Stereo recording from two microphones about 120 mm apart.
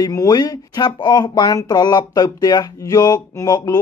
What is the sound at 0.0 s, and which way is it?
Speech, 30° left (ahead or behind).